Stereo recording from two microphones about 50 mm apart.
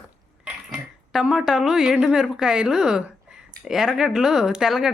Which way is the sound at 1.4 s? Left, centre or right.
Centre.